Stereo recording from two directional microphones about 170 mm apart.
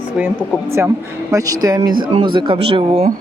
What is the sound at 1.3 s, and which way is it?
Speech, 20° right (ahead or behind).